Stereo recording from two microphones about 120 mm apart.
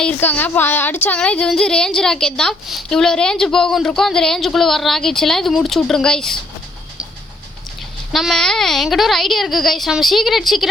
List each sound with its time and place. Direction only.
0.0 s speech: 10° left (ahead or behind)
8.1 s speech: centre (ahead or behind)